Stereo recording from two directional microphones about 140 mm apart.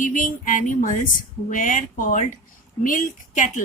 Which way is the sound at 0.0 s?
70° left (ahead or behind).